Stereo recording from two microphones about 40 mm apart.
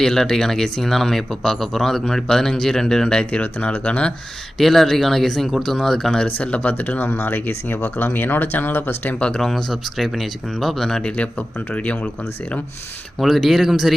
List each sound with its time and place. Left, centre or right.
0.0 s a man's voice: centre
3.3 s speech: left
4.5 s a man's voice: centre
6.2 s speech: left
7.1 s speech: left
9.1 s speech: left
9.4 s speech: centre
11.3 s speech: left
13.1 s speech: centre